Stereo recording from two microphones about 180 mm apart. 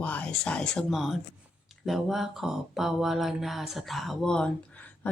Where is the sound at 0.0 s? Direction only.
10° left (ahead or behind).